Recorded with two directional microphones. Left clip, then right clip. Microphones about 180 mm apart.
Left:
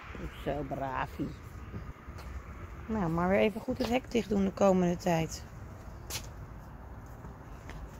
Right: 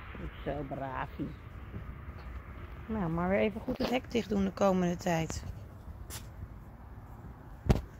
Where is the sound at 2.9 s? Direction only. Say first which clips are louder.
Left 2 dB; 5° left (ahead or behind).